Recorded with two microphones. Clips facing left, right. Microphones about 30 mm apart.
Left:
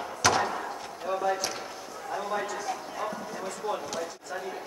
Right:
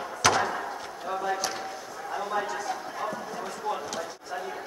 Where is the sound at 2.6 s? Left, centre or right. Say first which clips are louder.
Right 1 dB; centre.